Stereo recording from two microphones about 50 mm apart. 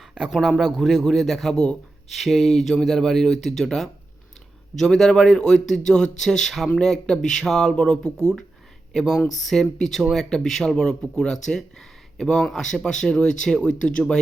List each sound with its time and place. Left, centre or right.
0.3 s a man's voice: centre
4.9 s speech: centre
7.8 s speech: centre
8.9 s speech: centre
10.0 s a man's voice: centre
10.2 s speech: centre